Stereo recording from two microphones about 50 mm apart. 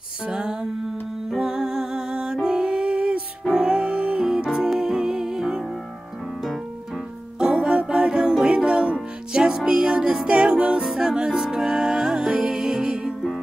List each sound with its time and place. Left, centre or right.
0.3 s music: centre
7.3 s music: centre